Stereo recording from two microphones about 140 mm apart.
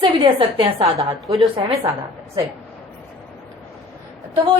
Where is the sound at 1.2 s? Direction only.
Centre (ahead or behind).